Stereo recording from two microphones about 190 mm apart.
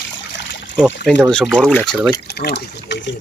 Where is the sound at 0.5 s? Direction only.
75° left (ahead or behind).